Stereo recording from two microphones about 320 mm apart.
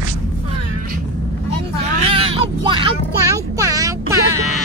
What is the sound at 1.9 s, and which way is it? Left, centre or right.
Speech, centre.